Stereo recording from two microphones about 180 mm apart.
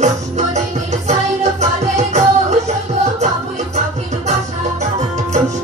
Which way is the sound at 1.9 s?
40° right (ahead or behind).